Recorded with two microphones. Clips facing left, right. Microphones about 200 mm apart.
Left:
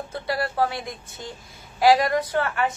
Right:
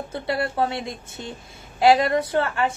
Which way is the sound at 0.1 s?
25° right (ahead or behind).